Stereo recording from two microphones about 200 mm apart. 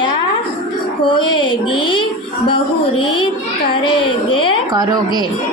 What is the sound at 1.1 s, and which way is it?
Music, 25° left (ahead or behind).